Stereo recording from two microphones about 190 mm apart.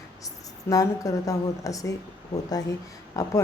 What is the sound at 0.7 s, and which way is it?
A woman's voice, 15° left (ahead or behind).